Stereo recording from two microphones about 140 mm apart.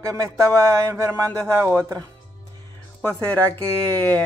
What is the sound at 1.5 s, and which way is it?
Speech, 20° right (ahead or behind).